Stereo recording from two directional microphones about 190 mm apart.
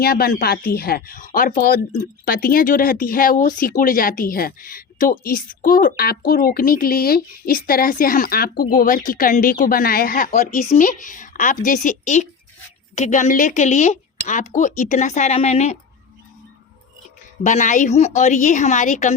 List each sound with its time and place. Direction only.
0.0 s a woman's voice: 50° left (ahead or behind); by 15.8 s 35° left (ahead or behind)
17.4 s a woman's voice: 40° left (ahead or behind)